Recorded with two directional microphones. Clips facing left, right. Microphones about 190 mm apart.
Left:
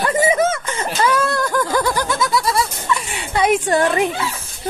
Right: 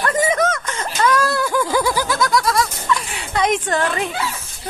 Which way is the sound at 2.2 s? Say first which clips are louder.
Right 1 dB; 5° left (ahead or behind).